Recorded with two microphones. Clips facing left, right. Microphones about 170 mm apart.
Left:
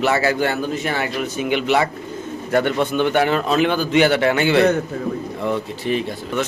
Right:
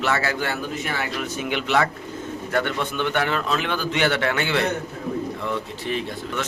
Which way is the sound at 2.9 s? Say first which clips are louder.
Left 6 dB; 15° left (ahead or behind).